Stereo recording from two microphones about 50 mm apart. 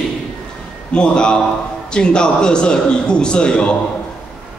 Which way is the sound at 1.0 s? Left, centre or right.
Centre.